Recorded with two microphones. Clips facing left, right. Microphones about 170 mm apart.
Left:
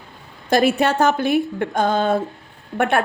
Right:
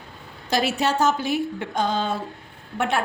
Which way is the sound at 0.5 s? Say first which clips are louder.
Left 6 dB; 55° left (ahead or behind).